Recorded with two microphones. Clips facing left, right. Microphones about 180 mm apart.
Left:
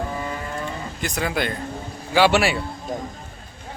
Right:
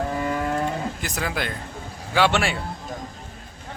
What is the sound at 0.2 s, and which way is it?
Livestock, 65° right (ahead or behind).